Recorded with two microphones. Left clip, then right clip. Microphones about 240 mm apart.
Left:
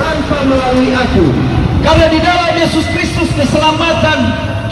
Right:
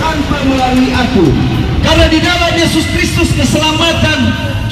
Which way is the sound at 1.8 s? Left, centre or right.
Right.